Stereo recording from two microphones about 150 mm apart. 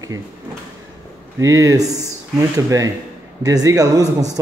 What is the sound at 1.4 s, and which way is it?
Speech, 20° right (ahead or behind).